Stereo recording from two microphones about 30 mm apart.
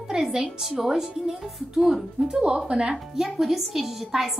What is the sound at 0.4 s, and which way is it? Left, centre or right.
Speech, centre.